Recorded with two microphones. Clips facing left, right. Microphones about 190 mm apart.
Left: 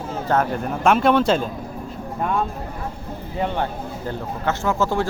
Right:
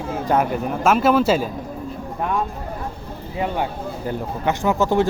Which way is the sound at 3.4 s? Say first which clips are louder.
Even; 10° right (ahead or behind).